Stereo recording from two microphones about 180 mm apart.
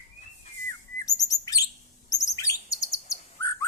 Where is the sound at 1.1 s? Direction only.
20° left (ahead or behind).